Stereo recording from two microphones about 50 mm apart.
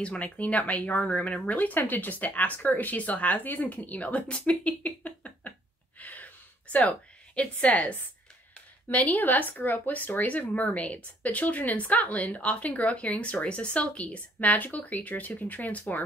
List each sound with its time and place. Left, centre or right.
0.0 s speech: left
5.9 s a sound: left
8.9 s speech: left